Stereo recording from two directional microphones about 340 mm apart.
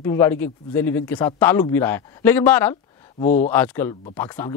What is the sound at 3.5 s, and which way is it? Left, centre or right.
Speech, centre.